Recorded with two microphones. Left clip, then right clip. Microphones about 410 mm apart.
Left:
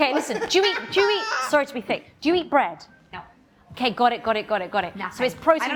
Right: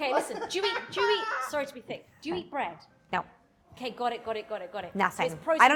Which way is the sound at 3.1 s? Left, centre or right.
Right.